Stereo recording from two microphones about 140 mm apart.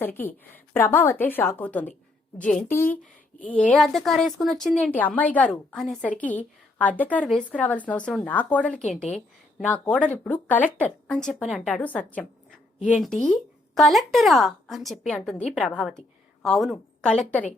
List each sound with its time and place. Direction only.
0.0 s a woman's voice: 15° left (ahead or behind)
7.3 s a woman's voice: centre (ahead or behind)
7.6 s a woman's voice: 10° left (ahead or behind)
11.4 s a woman's voice: 5° right (ahead or behind)
11.8 s a woman's voice: 10° left (ahead or behind)
12.8 s a woman's voice: 10° right (ahead or behind)
13.3 s a woman's voice: 5° left (ahead or behind)